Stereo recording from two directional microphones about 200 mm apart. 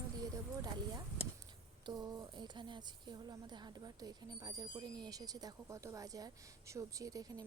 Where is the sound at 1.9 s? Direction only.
20° right (ahead or behind).